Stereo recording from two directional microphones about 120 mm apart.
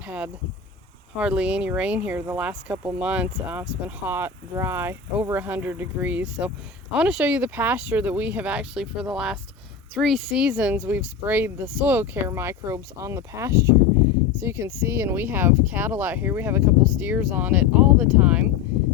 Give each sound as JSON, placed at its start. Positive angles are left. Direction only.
{"t": 1.1, "sound": "speech", "side_deg": -10}